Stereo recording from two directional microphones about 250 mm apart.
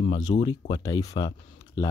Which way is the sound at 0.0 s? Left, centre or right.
Centre.